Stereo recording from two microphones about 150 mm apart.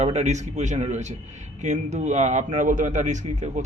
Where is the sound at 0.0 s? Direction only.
45° right (ahead or behind).